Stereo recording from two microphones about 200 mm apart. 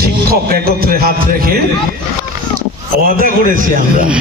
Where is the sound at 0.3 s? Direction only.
50° right (ahead or behind).